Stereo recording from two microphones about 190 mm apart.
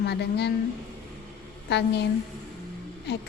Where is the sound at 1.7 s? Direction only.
65° left (ahead or behind).